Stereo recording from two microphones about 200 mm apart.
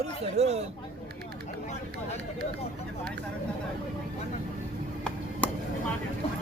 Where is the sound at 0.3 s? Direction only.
35° right (ahead or behind).